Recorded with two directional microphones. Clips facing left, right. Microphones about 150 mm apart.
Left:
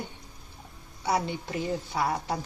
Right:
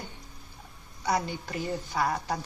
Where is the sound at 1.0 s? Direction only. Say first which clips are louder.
Left 1 dB; 25° left (ahead or behind).